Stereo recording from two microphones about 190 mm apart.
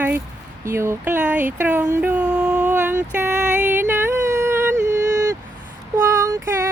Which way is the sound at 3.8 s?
10° right (ahead or behind).